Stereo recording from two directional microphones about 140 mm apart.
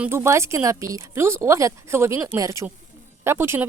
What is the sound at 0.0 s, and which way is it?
Speech, 20° right (ahead or behind).